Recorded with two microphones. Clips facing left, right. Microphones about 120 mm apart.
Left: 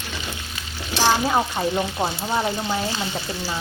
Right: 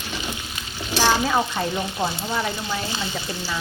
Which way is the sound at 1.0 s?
25° left (ahead or behind).